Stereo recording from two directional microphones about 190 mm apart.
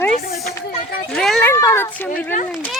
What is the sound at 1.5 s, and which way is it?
Speech, 15° left (ahead or behind).